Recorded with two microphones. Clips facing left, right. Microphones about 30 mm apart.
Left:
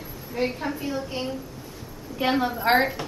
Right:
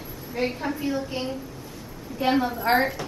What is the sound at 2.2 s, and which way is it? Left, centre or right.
Speech, centre.